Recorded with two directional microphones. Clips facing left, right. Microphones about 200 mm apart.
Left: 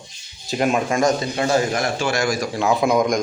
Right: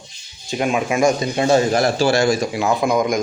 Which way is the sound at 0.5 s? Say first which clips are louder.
Even; centre (ahead or behind).